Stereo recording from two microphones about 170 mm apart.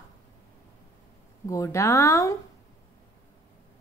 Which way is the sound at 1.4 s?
20° left (ahead or behind).